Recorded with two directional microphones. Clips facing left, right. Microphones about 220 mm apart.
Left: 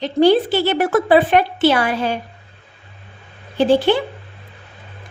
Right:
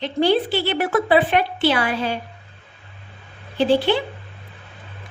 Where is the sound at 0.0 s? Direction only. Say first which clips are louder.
Left 5 dB; 45° left (ahead or behind).